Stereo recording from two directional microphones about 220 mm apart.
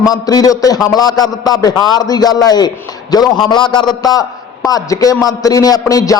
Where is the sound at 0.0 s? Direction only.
15° left (ahead or behind).